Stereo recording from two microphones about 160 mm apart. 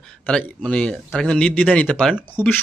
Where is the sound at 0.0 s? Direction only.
5° left (ahead or behind).